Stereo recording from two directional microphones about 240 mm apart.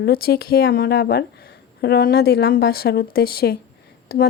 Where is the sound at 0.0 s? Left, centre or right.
Left.